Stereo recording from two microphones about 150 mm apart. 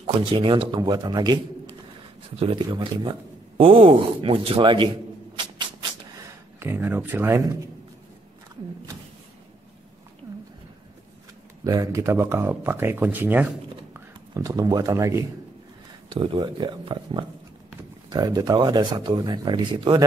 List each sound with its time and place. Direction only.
0.0 s speech: 35° right (ahead or behind)
2.3 s speech: 40° right (ahead or behind)
6.6 s speech: 15° right (ahead or behind)
10.3 s a sound: 20° right (ahead or behind)
11.6 s speech: 25° right (ahead or behind)
13.9 s speech: 25° right (ahead or behind)
16.2 s speech: 35° right (ahead or behind)